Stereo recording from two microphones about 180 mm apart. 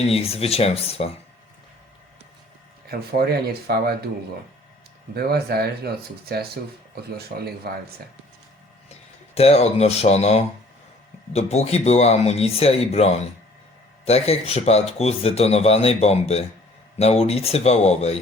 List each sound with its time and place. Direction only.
0.0 s speech: 35° left (ahead or behind)
2.9 s speech: 55° right (ahead or behind)
5.1 s speech: 60° right (ahead or behind)
9.3 s speech: 35° left (ahead or behind)